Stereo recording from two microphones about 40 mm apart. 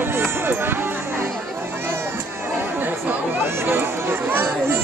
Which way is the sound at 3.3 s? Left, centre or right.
Right.